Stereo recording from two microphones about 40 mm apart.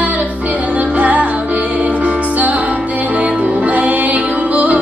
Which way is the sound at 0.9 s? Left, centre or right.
Right.